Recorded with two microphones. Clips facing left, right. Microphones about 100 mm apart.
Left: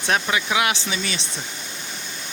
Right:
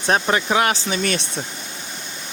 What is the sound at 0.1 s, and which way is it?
Speech, 40° right (ahead or behind).